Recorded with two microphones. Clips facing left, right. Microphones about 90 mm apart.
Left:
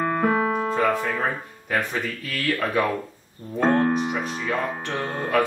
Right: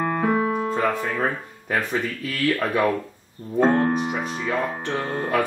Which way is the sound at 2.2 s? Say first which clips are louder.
Right 2 dB; centre (ahead or behind).